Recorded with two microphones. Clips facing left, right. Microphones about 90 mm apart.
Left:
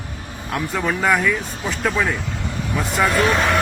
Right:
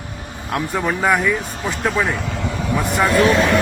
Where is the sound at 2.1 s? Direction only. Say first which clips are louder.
Right 3 dB; 90° right.